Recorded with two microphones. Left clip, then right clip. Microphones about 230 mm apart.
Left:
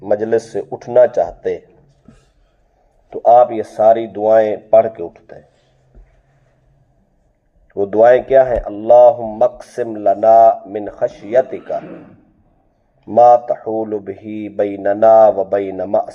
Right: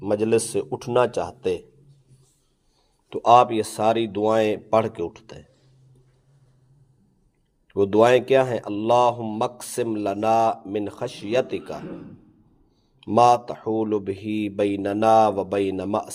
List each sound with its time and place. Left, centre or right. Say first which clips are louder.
0.2 s speech: left 4 dB; right
3.1 s speech: left 6 dB; right
7.7 s speech: left 7 dB; right
13.1 s speech: left 8 dB; right